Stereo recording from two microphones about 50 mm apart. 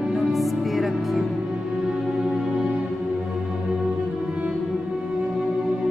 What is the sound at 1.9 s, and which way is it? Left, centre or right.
Music, centre.